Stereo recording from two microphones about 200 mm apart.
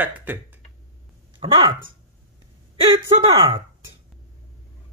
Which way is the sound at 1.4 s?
25° right (ahead or behind).